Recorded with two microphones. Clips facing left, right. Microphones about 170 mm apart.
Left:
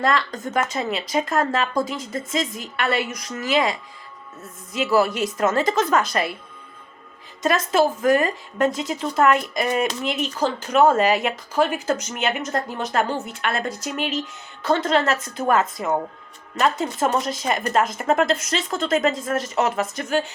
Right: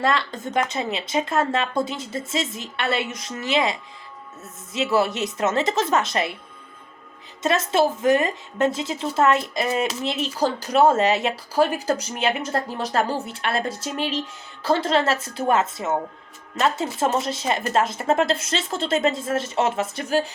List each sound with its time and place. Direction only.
0.0 s a woman's voice: 30° right (ahead or behind)
7.4 s a woman's voice: 25° right (ahead or behind)